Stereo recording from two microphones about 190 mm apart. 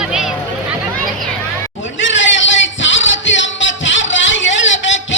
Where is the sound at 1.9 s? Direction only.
75° left (ahead or behind).